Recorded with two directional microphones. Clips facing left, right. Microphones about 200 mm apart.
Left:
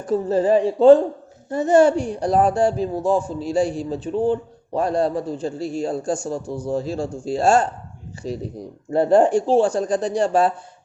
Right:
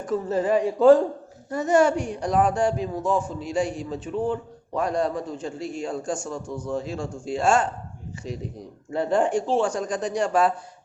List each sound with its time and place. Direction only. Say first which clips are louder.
0.0 s a woman's voice: left 5 dB; 30° left (ahead or behind)